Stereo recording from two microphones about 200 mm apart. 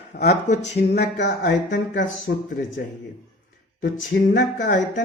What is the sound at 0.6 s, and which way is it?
Speech, 50° left (ahead or behind).